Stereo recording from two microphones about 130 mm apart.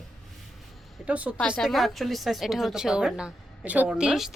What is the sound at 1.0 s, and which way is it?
Speech, 10° right (ahead or behind).